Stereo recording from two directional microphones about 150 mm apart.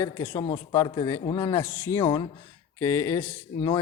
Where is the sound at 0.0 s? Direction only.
15° left (ahead or behind).